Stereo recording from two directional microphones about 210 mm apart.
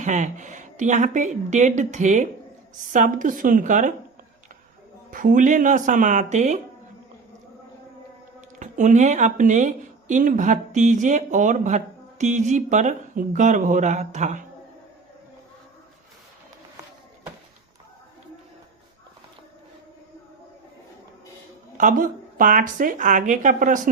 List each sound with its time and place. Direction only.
0.0 s a woman's voice: 35° right (ahead or behind)
5.1 s a woman's voice: 40° right (ahead or behind)
8.4 s a woman's voice: 35° right (ahead or behind)
21.8 s a woman's voice: 40° right (ahead or behind)